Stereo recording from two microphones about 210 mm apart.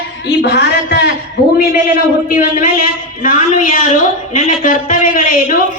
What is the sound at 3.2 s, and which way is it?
A man's voice, 40° left (ahead or behind).